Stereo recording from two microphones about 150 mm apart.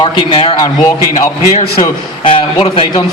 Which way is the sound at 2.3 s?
35° left (ahead or behind).